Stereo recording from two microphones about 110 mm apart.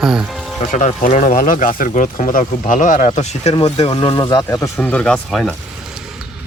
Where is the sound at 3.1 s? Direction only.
90° left.